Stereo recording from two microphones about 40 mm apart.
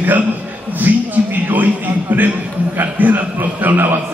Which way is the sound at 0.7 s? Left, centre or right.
Right.